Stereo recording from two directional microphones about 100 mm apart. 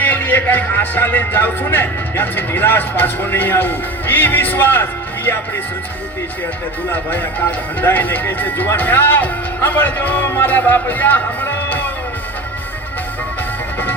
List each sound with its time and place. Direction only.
0.0 s speech: 20° left (ahead or behind)
6.9 s speech: 20° left (ahead or behind)